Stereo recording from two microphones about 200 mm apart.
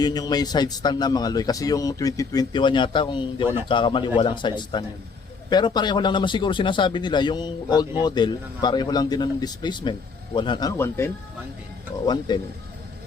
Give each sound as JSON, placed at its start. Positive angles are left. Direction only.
{"t": 0.0, "sound": "a man's voice", "side_deg": 20}